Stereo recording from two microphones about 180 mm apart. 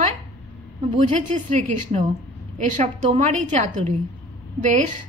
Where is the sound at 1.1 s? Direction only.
45° right (ahead or behind).